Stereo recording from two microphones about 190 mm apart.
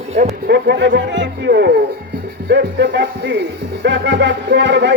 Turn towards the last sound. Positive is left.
turn(degrees=-65)  # may be behind; listen again after turning